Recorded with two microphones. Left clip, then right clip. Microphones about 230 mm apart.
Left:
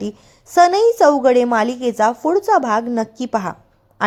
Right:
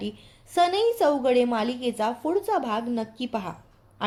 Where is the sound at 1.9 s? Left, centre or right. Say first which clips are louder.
Left 11 dB; left.